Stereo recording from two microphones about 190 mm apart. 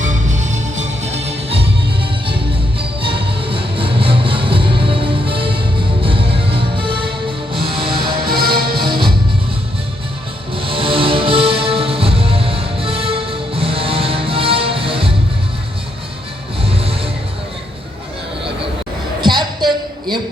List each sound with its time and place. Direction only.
0.0 s music: 40° right (ahead or behind)
2.7 s music: 25° right (ahead or behind)
8.3 s music: 55° right (ahead or behind)
10.5 s music: 30° right (ahead or behind)
16.6 s music: 30° right (ahead or behind)
19.2 s a sound: 25° right (ahead or behind)